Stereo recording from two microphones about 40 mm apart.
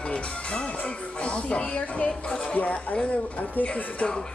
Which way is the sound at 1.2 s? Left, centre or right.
Left.